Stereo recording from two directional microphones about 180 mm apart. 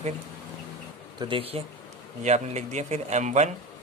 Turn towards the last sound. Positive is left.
turn(degrees=-40)  # may be behind; listen again after turning